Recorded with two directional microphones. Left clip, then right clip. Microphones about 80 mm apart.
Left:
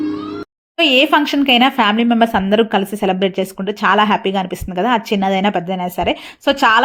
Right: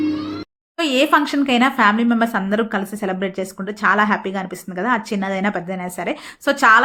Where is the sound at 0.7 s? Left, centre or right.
Left.